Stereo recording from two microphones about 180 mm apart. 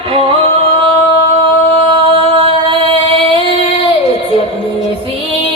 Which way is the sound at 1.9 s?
30° right (ahead or behind).